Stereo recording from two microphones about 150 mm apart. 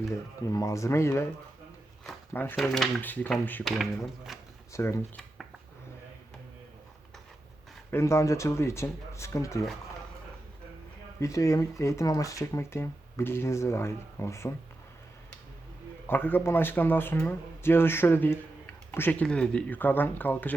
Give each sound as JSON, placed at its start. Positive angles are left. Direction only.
{"t": 0.1, "sound": "speech", "side_deg": 20}
{"t": 2.3, "sound": "speech", "side_deg": 15}
{"t": 2.6, "sound": "speech", "side_deg": 0}
{"t": 3.6, "sound": "speech", "side_deg": 0}
{"t": 4.7, "sound": "speech", "side_deg": 20}
{"t": 7.9, "sound": "speech", "side_deg": 15}
{"t": 11.2, "sound": "speech", "side_deg": 20}
{"t": 16.0, "sound": "speech", "side_deg": 15}